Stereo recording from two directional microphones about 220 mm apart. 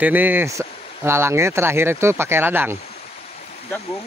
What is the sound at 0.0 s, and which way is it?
Speech, 10° right (ahead or behind).